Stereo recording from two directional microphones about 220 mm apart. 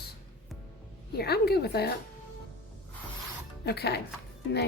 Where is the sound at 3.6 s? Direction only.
50° left (ahead or behind).